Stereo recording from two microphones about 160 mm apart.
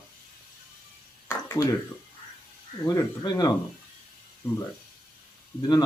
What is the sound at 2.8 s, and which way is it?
Speech, 20° left (ahead or behind).